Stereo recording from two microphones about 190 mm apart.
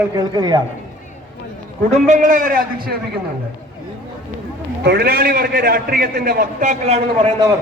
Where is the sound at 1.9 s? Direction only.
40° right (ahead or behind).